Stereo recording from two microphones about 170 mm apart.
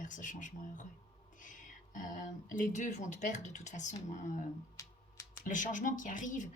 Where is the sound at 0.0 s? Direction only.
50° left (ahead or behind).